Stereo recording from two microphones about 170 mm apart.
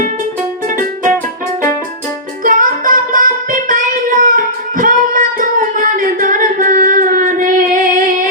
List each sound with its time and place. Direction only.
2.4 s music: 50° right (ahead or behind)